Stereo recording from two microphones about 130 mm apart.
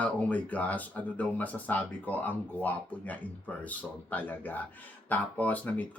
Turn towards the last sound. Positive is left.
turn(degrees=10)  # may be behind; listen again after turning